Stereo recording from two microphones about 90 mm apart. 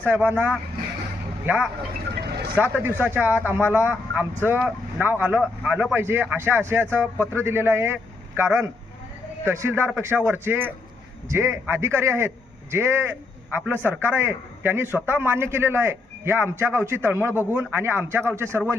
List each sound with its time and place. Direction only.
0.0 s a man's voice: 20° right (ahead or behind)
6.0 s a man's voice: 25° right (ahead or behind)